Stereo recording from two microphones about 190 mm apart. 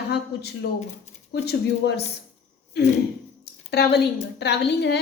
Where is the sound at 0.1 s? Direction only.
60° left (ahead or behind).